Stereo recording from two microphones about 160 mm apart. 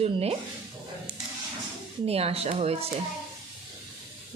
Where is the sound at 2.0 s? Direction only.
40° right (ahead or behind).